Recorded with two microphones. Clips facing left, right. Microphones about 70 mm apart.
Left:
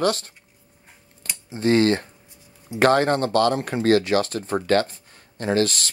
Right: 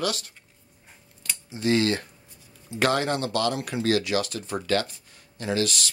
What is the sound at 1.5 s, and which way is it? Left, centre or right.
Speech, left.